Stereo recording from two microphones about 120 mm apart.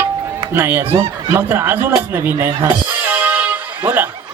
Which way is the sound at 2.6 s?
15° right (ahead or behind).